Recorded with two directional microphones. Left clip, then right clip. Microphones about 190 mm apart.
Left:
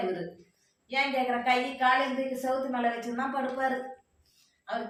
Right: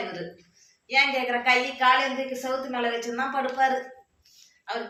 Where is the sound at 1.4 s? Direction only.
20° left (ahead or behind).